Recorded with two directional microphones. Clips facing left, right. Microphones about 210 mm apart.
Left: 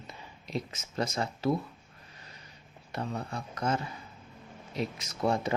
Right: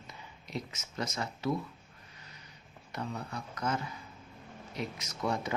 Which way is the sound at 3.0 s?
30° left (ahead or behind).